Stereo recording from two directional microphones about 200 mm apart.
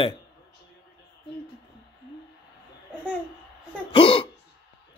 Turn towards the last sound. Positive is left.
turn(degrees=25)  # may be behind; listen again after turning